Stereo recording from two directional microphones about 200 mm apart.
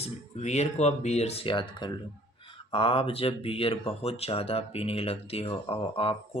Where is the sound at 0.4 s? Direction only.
35° left (ahead or behind).